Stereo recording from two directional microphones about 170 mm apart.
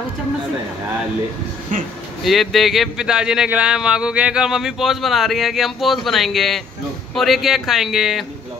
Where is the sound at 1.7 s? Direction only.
55° right (ahead or behind).